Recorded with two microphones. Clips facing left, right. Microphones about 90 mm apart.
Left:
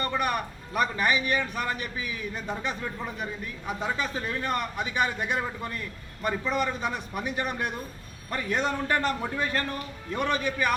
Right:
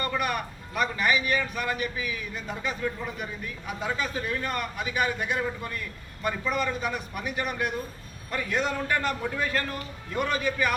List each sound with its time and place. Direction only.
0.0 s a man's voice: 30° left (ahead or behind)